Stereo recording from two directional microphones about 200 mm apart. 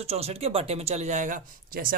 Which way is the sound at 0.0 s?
30° right (ahead or behind).